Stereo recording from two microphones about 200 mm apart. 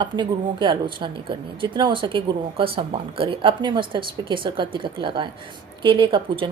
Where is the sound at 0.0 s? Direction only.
25° right (ahead or behind).